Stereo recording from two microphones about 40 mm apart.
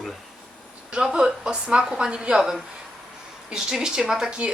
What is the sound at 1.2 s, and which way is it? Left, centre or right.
A woman's voice, right.